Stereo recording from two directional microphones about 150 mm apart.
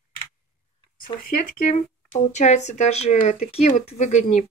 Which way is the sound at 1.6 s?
50° left (ahead or behind).